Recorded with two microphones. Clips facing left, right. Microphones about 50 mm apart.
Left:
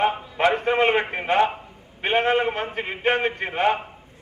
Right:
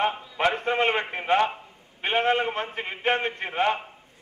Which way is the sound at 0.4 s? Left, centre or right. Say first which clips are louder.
Left 4 dB; centre.